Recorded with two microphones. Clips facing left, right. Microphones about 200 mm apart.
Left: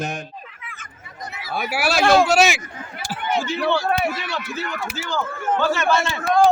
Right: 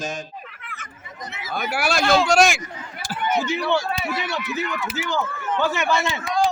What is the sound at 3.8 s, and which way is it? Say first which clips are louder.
Speech: left 6 dB; 55° left (ahead or behind).